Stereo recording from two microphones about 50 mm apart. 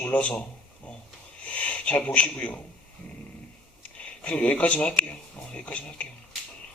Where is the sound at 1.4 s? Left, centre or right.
Left.